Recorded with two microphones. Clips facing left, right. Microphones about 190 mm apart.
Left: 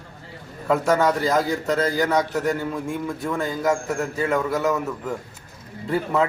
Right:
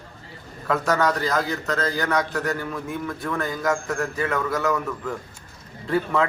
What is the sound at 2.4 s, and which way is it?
Speech, 25° left (ahead or behind).